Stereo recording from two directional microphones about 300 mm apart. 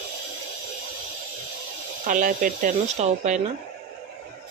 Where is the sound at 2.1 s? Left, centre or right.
Right.